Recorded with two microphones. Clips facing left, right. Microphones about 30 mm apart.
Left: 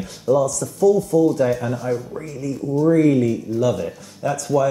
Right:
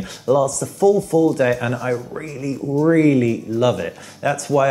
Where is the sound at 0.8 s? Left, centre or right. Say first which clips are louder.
Right 1 dB; right.